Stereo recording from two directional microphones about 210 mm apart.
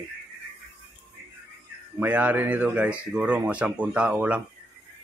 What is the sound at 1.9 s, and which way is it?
Speech, 10° right (ahead or behind).